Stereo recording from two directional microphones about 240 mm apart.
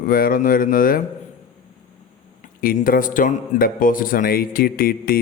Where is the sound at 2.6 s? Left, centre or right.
Left.